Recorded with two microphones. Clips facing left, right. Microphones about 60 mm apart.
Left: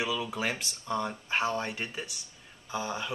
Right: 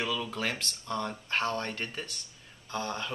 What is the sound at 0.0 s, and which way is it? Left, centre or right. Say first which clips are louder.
Speech: left 1 dB; centre.